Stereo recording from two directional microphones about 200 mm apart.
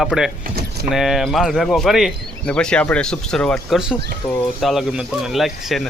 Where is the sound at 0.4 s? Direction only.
50° right (ahead or behind).